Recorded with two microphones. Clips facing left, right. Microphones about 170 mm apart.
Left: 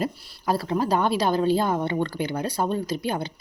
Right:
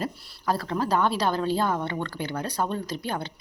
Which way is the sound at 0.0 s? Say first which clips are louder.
Left 3 dB; 10° left (ahead or behind).